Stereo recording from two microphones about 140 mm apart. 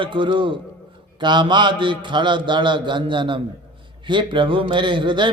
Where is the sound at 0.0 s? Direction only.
35° right (ahead or behind).